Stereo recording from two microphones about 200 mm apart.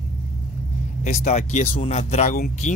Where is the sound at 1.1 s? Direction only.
35° left (ahead or behind).